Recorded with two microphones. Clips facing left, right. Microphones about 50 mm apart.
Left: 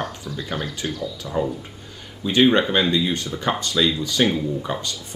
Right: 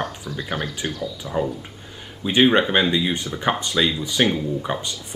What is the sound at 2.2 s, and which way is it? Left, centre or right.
Speech, centre.